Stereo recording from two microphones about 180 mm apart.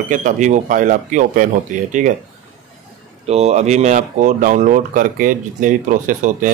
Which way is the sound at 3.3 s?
35° right (ahead or behind).